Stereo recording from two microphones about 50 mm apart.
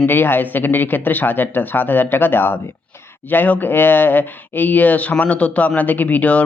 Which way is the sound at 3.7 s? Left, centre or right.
Left.